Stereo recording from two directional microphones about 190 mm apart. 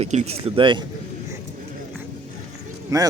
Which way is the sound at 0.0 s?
35° right (ahead or behind).